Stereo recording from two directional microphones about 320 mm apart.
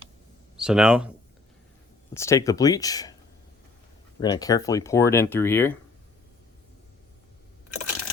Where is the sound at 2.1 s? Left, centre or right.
Centre.